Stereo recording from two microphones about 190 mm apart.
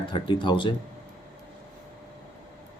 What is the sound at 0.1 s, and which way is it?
Speech, 25° left (ahead or behind).